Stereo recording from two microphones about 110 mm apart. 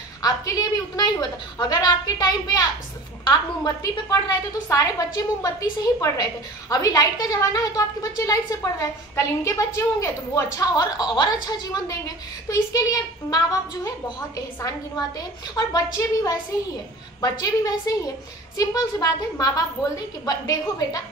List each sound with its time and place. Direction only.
0.2 s a woman's voice: 35° left (ahead or behind)